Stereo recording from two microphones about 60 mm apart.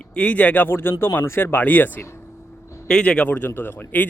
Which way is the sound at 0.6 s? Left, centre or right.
Left.